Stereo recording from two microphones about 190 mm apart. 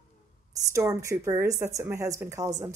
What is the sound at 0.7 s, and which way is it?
Speech, 15° right (ahead or behind).